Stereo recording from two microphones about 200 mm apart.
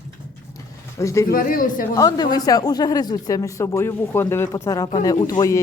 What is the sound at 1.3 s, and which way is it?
Speech, 45° left (ahead or behind).